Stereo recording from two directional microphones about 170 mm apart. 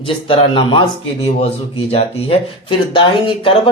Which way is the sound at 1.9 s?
35° left (ahead or behind).